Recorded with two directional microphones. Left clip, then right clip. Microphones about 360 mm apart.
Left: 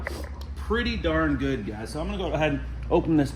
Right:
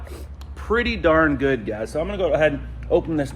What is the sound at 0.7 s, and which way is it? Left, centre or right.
Speech, centre.